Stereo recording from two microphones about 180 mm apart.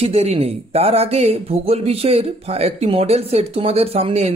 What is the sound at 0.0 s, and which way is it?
Speech, 35° right (ahead or behind).